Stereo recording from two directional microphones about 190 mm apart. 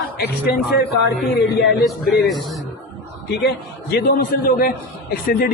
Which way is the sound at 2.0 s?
55° left (ahead or behind).